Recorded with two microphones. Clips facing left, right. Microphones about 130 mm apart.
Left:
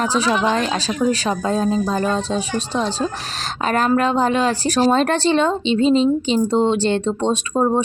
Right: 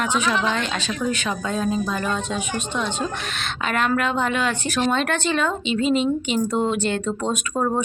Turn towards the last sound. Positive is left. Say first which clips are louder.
# left 5 dB
turn(degrees=30)  # may be behind; listen again after turning